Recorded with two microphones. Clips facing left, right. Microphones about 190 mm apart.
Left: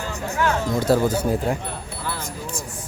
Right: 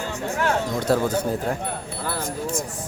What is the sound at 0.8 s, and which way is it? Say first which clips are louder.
Speech: left 3 dB; 5° left (ahead or behind).